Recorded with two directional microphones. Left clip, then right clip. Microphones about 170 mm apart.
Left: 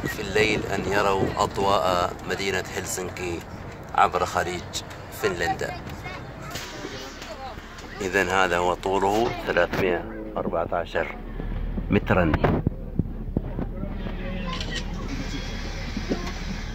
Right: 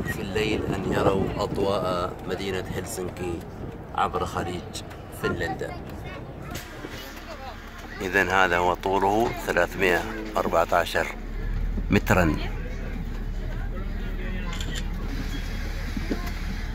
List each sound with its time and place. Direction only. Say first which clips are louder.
0.2 s speech: left 5 dB; 15° left (ahead or behind)
8.0 s speech: right 1 dB; centre (ahead or behind)